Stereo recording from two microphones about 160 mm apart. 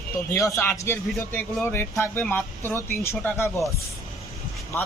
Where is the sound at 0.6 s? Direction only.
15° left (ahead or behind).